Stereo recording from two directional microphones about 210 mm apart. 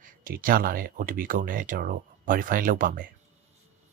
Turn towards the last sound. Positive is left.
turn(degrees=-40)  # may be behind; listen again after turning